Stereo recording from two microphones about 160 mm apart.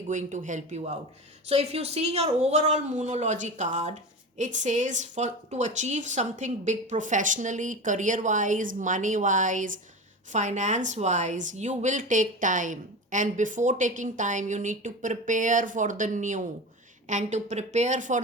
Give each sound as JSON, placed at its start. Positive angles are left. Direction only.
{"t": 0.1, "sound": "speech", "side_deg": -50}